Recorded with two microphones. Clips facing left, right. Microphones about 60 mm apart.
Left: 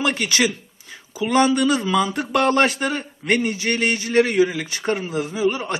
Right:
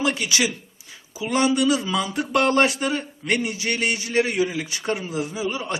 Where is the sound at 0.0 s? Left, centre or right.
Left.